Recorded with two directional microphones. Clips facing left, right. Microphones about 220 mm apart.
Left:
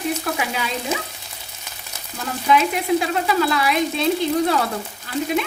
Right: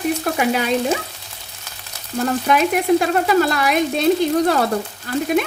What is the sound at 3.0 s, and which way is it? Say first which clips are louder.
Speech: right 4 dB; 45° right (ahead or behind).